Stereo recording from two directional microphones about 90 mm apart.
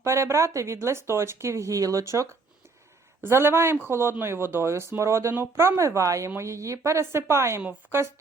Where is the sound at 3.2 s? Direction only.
25° right (ahead or behind).